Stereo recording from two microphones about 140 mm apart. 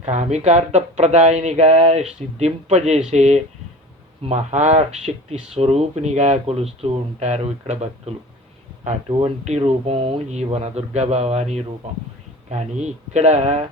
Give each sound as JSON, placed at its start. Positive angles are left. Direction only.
{"t": 0.0, "sound": "speech", "side_deg": -55}